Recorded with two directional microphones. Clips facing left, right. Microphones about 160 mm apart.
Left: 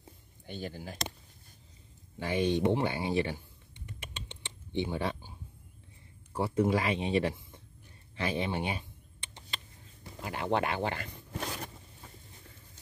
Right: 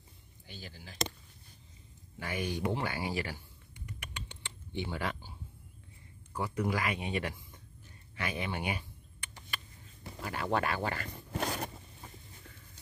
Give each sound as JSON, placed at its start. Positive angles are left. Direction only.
{"t": 0.5, "sound": "speech", "side_deg": 50}
{"t": 2.1, "sound": "a sound", "side_deg": 25}
{"t": 6.3, "sound": "speech", "side_deg": 30}
{"t": 8.2, "sound": "computer keyboard", "side_deg": 30}
{"t": 10.2, "sound": "speech", "side_deg": 20}
{"t": 11.3, "sound": "a sound", "side_deg": -60}